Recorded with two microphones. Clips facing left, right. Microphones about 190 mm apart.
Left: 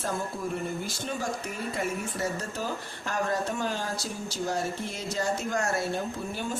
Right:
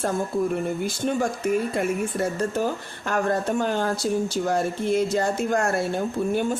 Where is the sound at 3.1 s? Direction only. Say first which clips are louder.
Right 6 dB; 55° right (ahead or behind).